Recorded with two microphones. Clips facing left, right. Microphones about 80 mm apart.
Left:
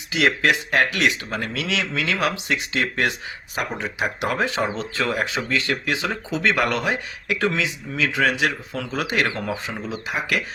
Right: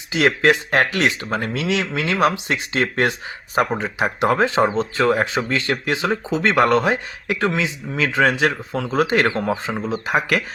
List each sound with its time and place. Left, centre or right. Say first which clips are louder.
0.1 s speech: right 3 dB; right